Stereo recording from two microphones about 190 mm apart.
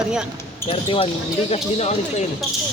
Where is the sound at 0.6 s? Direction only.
30° left (ahead or behind).